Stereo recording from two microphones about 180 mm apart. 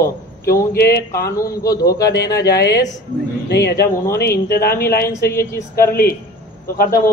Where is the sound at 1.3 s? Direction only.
20° left (ahead or behind).